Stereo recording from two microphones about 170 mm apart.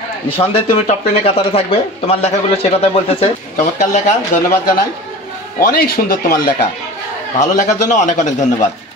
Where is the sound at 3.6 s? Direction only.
45° left (ahead or behind).